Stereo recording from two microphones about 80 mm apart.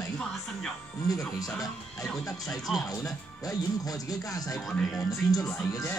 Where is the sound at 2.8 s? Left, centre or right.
Left.